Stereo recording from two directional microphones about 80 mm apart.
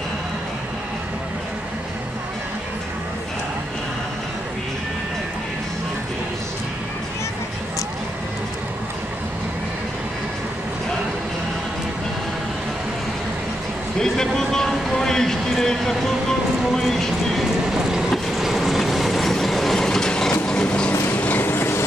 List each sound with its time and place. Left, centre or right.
13.9 s vehicle: centre
16.7 s a sound: centre
17.6 s train: centre; by 21.8 s left